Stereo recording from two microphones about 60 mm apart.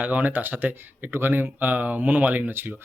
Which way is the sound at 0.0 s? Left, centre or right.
Right.